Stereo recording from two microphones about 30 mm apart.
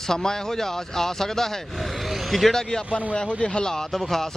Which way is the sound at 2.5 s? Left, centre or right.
Centre.